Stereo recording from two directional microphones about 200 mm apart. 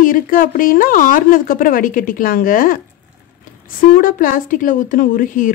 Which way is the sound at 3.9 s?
45° left (ahead or behind).